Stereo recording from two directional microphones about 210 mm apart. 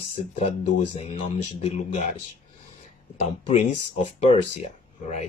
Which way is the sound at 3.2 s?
30° left (ahead or behind).